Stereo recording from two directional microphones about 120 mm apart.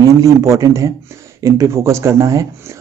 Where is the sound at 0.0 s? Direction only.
25° right (ahead or behind).